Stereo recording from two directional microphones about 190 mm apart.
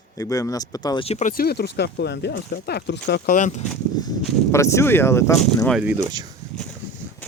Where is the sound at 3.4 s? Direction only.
40° left (ahead or behind).